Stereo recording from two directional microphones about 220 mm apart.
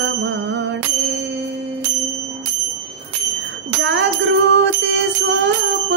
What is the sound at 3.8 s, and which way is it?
Bicycle bell, 55° right (ahead or behind).